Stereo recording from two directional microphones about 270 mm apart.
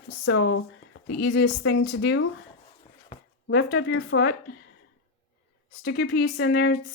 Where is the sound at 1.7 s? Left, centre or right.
Left.